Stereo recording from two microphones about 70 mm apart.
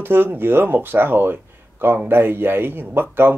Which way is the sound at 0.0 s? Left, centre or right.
Right.